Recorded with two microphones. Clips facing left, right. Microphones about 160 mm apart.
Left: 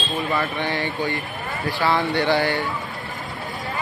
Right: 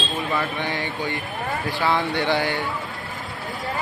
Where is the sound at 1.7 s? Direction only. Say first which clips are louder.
Left 2 dB; 20° right (ahead or behind).